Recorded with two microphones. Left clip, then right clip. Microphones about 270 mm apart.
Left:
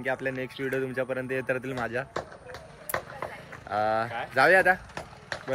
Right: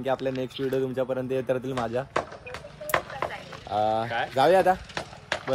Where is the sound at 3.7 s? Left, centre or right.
Centre.